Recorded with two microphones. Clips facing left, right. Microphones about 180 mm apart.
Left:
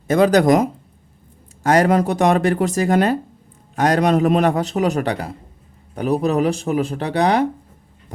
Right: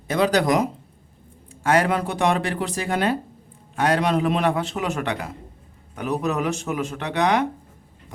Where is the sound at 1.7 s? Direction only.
40° left (ahead or behind).